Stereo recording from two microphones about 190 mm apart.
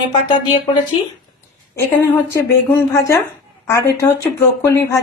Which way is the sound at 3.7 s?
15° left (ahead or behind).